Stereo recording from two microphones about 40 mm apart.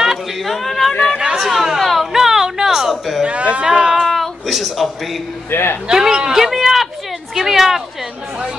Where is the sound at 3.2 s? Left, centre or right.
Right.